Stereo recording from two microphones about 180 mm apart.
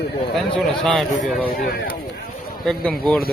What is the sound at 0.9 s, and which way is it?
Speech, centre (ahead or behind).